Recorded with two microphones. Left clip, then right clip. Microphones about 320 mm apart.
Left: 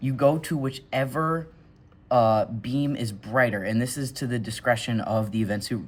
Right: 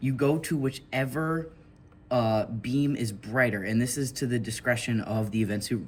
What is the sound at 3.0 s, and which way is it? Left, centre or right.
Speech, left.